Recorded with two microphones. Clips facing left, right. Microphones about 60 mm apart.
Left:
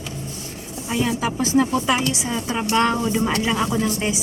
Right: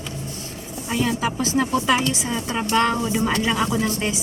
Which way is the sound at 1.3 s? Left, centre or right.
Left.